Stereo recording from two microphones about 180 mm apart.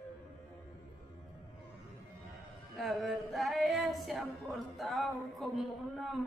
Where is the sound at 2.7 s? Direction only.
Centre (ahead or behind).